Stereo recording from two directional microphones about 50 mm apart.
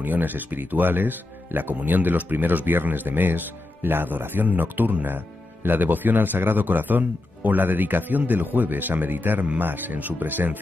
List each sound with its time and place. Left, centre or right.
0.0 s speech: right